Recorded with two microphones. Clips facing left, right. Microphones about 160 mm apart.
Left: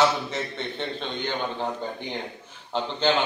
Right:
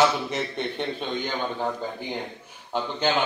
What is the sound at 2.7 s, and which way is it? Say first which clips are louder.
Speech: left 1 dB; 10° right (ahead or behind).